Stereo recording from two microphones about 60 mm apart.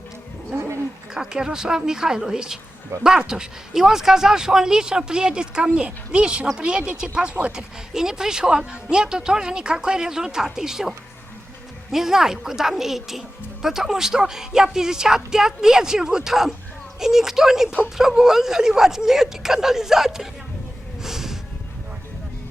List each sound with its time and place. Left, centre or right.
1.1 s speech: centre
21.0 s music: centre